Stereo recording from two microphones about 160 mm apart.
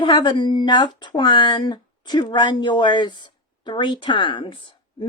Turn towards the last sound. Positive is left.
turn(degrees=30)  # may be behind; listen again after turning